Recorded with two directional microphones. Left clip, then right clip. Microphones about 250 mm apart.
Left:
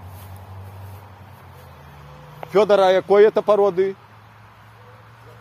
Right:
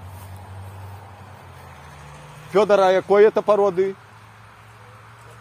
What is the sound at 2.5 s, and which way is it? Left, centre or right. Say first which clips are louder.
Speech: left 1 dB; centre.